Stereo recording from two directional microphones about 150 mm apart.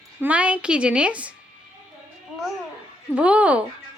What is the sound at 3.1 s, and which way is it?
Speech, 10° right (ahead or behind).